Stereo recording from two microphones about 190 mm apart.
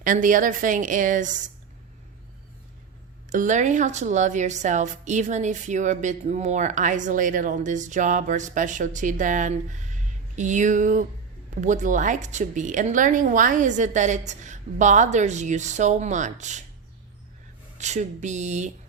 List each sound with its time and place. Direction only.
0.0 s a woman's voice: 45° right (ahead or behind)
3.2 s a woman's voice: 40° right (ahead or behind)
17.7 s a woman's voice: 40° right (ahead or behind)